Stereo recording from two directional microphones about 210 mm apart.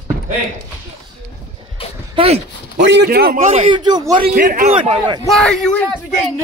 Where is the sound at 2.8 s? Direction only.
55° right (ahead or behind).